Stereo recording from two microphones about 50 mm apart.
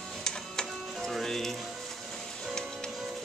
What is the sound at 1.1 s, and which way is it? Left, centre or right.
Speech, centre.